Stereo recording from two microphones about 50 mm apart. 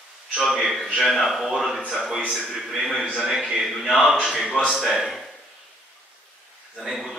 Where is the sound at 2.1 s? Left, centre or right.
Centre.